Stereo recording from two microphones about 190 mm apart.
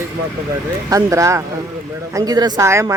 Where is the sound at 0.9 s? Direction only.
15° right (ahead or behind).